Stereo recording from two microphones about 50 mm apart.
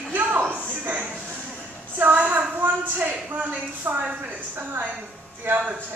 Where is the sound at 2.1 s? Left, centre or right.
Right.